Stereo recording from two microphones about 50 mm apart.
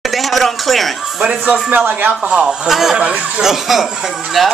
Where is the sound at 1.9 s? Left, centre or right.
Right.